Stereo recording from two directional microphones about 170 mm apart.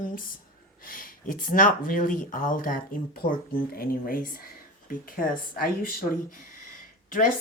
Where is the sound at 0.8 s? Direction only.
55° left (ahead or behind).